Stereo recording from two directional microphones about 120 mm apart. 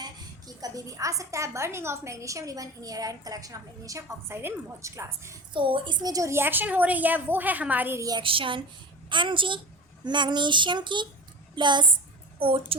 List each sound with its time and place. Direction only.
0.0 s a woman's voice: 30° right (ahead or behind)
5.5 s a woman's voice: 45° right (ahead or behind); by 8.0 s 15° right (ahead or behind)
8.2 s a woman's voice: 45° right (ahead or behind)
12.4 s a woman's voice: 50° right (ahead or behind)